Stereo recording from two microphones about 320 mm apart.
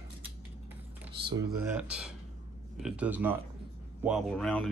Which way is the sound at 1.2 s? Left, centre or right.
Centre.